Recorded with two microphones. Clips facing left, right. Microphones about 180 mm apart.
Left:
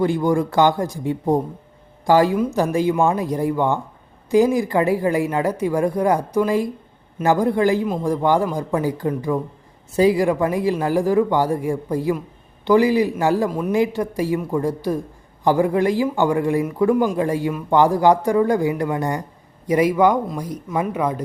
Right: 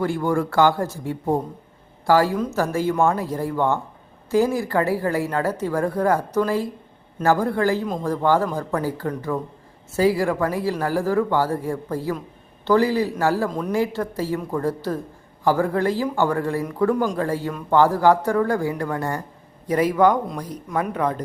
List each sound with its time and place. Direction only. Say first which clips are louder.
0.0 s a man's voice: left 3 dB; 15° left (ahead or behind)